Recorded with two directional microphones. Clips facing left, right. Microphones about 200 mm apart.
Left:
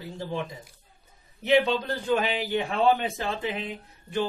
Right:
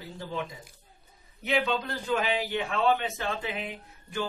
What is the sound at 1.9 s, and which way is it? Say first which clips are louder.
A man's voice: left 3 dB; 35° left (ahead or behind).